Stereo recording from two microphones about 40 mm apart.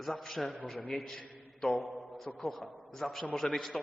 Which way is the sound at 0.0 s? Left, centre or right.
Centre.